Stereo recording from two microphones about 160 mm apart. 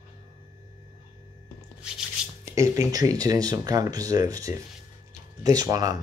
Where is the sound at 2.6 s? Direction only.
20° right (ahead or behind).